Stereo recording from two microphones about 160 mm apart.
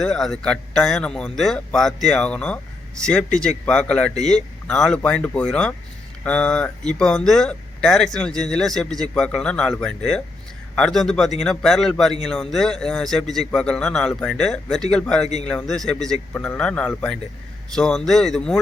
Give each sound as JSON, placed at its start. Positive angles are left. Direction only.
{"t": 0.0, "sound": "speech", "side_deg": 5}